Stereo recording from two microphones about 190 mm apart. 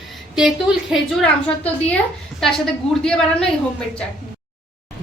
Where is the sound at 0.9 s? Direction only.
Centre (ahead or behind).